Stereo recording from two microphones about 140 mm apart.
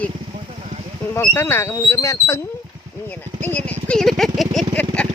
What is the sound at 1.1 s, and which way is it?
Speech, 15° left (ahead or behind).